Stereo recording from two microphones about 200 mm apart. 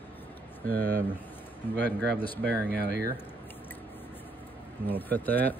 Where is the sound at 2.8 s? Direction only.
55° right (ahead or behind).